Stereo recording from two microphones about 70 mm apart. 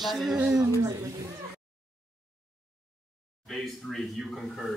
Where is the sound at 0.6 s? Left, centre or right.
Right.